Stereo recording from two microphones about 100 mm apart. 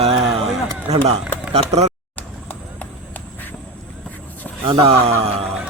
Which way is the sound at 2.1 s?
15° left (ahead or behind).